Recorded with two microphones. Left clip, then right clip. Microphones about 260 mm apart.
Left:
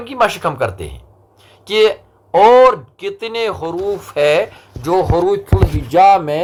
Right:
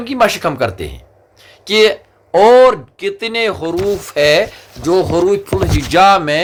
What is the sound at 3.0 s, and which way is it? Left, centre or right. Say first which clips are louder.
Speech: right 4 dB; right.